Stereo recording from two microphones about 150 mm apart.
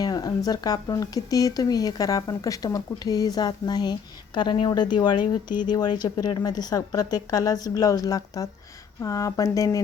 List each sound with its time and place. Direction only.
0.0 s speech: 25° left (ahead or behind)